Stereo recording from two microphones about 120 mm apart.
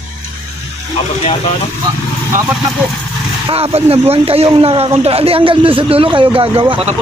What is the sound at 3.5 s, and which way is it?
Speech, 55° right (ahead or behind).